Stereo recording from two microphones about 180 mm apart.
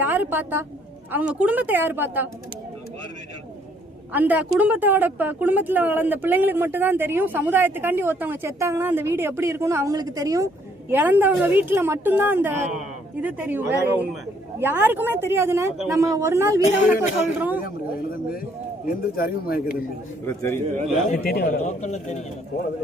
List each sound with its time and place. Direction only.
0.0 s a woman's voice: 10° right (ahead or behind)
4.1 s a woman's voice: 10° right (ahead or behind)
18.9 s speech: 55° left (ahead or behind)
20.2 s a man's voice: 15° left (ahead or behind)
21.2 s speech: 55° left (ahead or behind)
21.8 s a man's voice: 40° left (ahead or behind)